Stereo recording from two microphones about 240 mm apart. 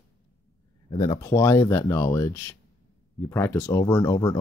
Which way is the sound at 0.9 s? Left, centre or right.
Centre.